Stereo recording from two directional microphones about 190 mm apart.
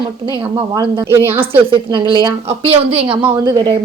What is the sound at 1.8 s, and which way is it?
A woman's voice, 25° right (ahead or behind).